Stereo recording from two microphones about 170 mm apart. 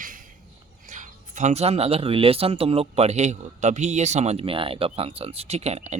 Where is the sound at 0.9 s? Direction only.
50° right (ahead or behind).